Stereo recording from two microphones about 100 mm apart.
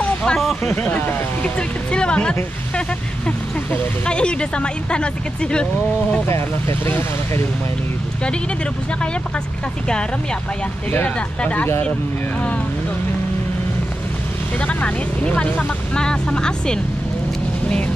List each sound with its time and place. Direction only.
0.0 s vehicle: 10° left (ahead or behind)
0.7 s speech: 20° left (ahead or behind)
6.9 s speech: 20° left (ahead or behind)
10.9 s speech: 15° left (ahead or behind)
14.6 s speech: 15° left (ahead or behind)